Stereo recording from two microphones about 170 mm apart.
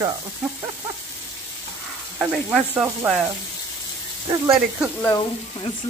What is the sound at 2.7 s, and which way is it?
Frying, 10° right (ahead or behind).